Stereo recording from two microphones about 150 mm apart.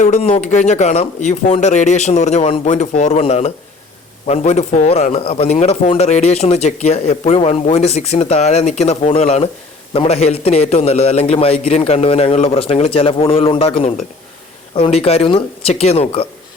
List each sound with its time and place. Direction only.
0.0 s a man's voice: 40° left (ahead or behind)